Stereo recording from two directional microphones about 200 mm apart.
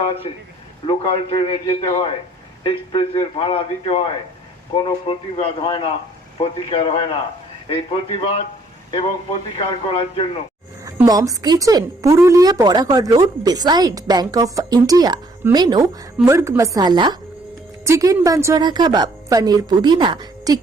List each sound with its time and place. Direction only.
0.0 s a man's voice: 30° left (ahead or behind)
9.6 s a man's voice: 25° left (ahead or behind)
10.8 s a woman's voice: 15° right (ahead or behind)